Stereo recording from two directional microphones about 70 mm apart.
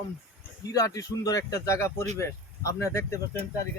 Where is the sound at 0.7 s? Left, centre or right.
Left.